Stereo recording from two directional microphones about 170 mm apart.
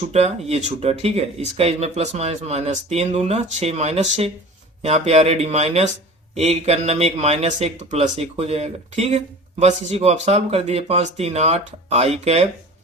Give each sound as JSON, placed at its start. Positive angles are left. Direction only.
{"t": 0.1, "sound": "speech", "side_deg": -40}